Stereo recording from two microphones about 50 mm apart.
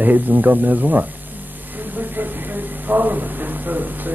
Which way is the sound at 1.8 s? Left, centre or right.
Right.